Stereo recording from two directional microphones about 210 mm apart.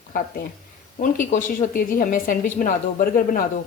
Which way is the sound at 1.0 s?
40° left (ahead or behind).